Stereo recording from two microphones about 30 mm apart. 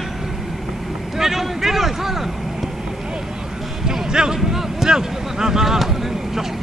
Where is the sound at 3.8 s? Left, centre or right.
Centre.